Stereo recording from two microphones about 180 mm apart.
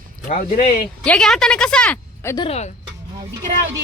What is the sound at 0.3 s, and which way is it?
Speech, 45° left (ahead or behind).